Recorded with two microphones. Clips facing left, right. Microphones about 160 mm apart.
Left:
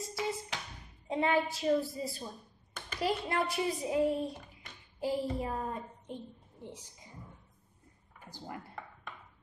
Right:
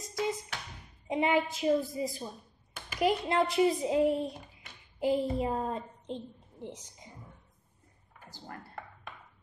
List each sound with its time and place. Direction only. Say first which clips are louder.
1.0 s a woman's voice: right 2 dB; 15° right (ahead or behind)
8.3 s speech: left 2 dB; 15° left (ahead or behind)